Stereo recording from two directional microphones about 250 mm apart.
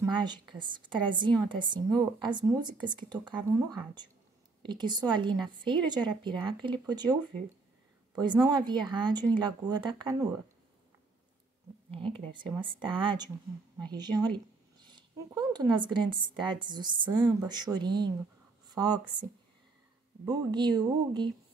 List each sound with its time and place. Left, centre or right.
0.0 s a woman's voice: centre
8.2 s a woman's voice: centre
11.9 s a woman's voice: centre
20.2 s speech: centre